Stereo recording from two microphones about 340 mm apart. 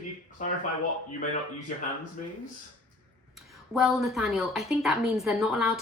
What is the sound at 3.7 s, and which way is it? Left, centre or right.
A woman's voice, centre.